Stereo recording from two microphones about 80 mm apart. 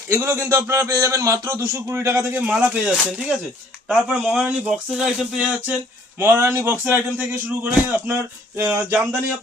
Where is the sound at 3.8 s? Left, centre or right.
Centre.